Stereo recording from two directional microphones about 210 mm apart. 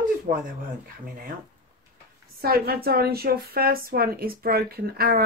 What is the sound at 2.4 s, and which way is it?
A woman's voice, 45° right (ahead or behind).